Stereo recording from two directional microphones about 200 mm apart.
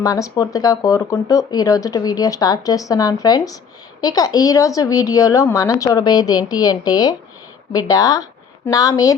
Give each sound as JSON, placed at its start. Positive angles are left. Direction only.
{"t": 0.0, "sound": "speech", "side_deg": 15}